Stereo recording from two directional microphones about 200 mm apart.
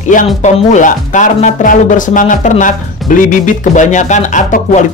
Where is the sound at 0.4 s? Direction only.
35° left (ahead or behind).